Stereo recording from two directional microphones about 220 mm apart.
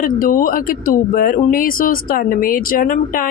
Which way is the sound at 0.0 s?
40° left (ahead or behind).